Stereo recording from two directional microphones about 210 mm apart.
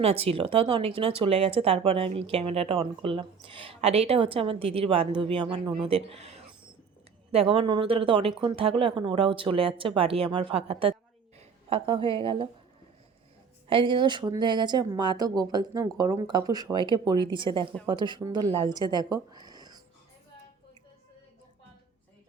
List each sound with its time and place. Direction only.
0.0 s a woman's voice: 30° right (ahead or behind)
13.7 s a woman's voice: 25° right (ahead or behind)